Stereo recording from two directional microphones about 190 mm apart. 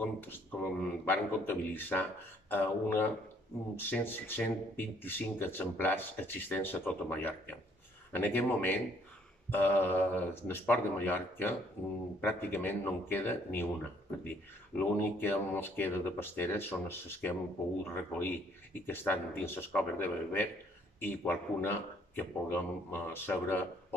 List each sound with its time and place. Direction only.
0.0 s speech: 10° left (ahead or behind)
14.8 s speech: 10° left (ahead or behind)